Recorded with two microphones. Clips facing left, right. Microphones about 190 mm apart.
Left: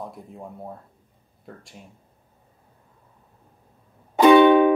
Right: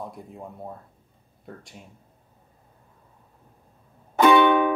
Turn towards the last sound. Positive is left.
turn(degrees=20)  # may be behind; listen again after turning